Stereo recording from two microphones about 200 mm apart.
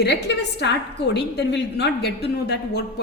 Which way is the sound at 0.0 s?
60° left (ahead or behind).